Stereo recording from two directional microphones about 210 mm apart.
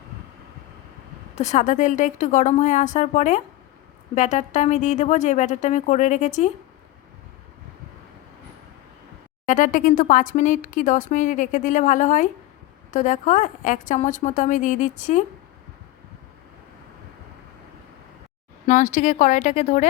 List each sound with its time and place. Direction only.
1.4 s speech: 35° left (ahead or behind)
9.5 s speech: 40° left (ahead or behind)
18.6 s speech: 35° left (ahead or behind)